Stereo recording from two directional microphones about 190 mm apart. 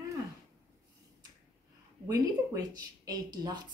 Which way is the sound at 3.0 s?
20° right (ahead or behind).